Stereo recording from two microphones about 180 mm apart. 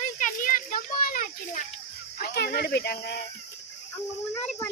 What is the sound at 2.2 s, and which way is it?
Speech, 60° left (ahead or behind).